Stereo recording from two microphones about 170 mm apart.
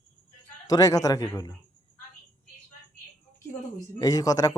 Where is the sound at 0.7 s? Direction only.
20° left (ahead or behind).